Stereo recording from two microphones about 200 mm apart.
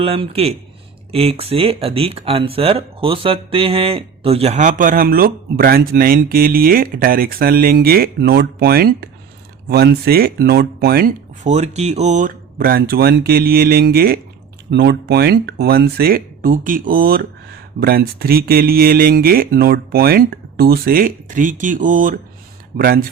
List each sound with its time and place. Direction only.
0.0 s speech: 30° right (ahead or behind); by 11.1 s 50° right (ahead or behind)
11.4 s speech: 35° right (ahead or behind)